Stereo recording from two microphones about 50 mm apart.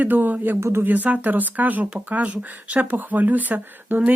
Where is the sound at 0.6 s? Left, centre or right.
Right.